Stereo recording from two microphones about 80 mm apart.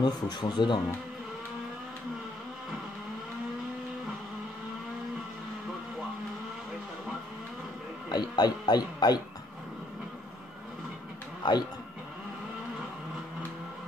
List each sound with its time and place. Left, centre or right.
0.0 s speech: left
8.1 s speech: left
11.4 s speech: left